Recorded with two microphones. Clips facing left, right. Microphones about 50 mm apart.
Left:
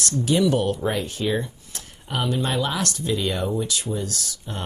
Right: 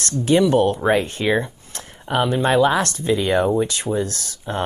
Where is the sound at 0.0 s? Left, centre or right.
Right.